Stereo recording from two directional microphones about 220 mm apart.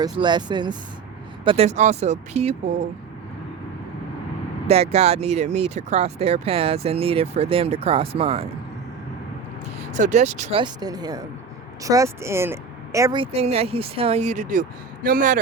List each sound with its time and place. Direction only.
0.0 s speech: 20° right (ahead or behind)
4.7 s speech: 30° right (ahead or behind)
9.9 s speech: 35° right (ahead or behind)